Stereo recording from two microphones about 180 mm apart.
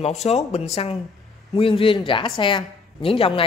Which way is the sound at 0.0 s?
35° left (ahead or behind).